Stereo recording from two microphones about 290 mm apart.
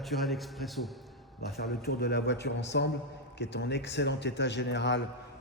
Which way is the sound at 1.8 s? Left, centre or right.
Left.